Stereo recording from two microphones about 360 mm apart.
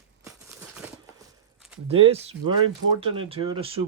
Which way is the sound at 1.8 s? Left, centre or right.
Centre.